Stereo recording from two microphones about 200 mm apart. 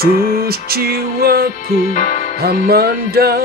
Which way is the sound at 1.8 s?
40° left (ahead or behind).